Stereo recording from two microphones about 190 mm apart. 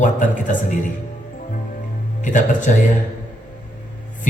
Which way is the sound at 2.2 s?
40° left (ahead or behind).